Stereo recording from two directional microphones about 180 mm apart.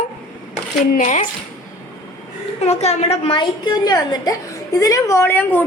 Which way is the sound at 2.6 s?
40° left (ahead or behind).